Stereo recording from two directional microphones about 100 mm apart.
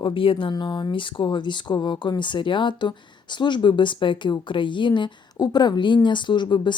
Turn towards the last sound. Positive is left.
turn(degrees=50)  # may be behind; listen again after turning